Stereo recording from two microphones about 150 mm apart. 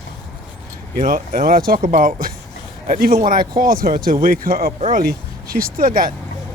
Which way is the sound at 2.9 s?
75° right (ahead or behind).